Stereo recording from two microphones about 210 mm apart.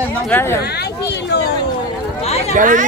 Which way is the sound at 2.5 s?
40° right (ahead or behind).